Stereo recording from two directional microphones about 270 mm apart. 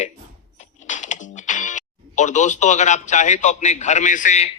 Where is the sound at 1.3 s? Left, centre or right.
Left.